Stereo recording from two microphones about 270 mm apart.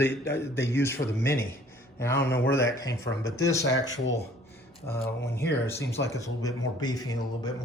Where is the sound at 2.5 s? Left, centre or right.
Centre.